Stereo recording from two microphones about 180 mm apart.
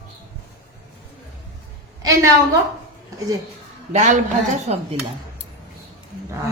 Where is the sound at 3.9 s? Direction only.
40° right (ahead or behind).